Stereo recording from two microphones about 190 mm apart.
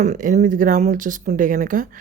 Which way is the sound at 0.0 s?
40° right (ahead or behind).